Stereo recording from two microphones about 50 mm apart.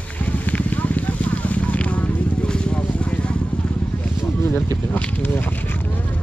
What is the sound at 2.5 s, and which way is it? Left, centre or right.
Vehicle, left.